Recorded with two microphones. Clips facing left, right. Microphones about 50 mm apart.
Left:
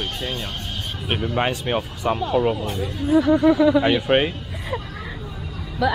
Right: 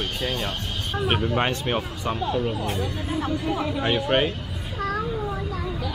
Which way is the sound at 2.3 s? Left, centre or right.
Left.